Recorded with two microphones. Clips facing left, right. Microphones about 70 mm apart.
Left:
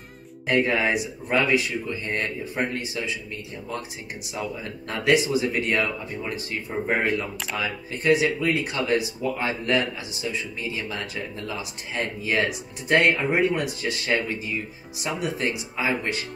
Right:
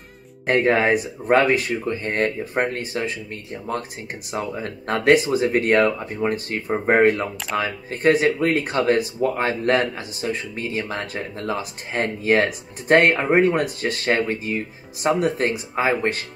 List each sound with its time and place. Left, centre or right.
0.5 s speech: right